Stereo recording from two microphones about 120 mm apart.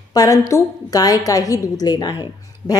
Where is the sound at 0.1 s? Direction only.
30° left (ahead or behind).